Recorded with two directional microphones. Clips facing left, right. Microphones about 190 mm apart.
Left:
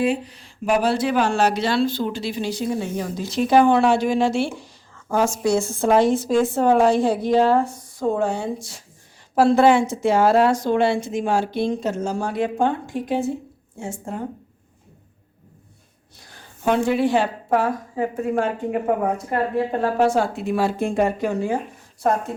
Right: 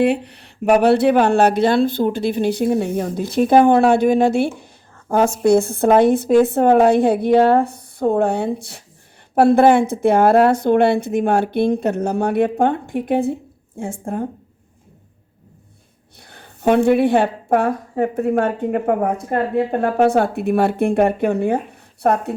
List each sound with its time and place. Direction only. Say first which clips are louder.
0.0 s a woman's voice: right 5 dB; 65° right (ahead or behind)
16.3 s a woman's voice: right 5 dB; 60° right (ahead or behind)